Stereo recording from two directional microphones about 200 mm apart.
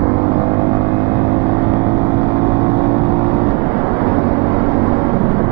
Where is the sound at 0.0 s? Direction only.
20° right (ahead or behind).